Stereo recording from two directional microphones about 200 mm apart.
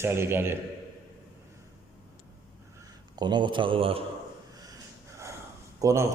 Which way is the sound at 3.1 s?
20° right (ahead or behind).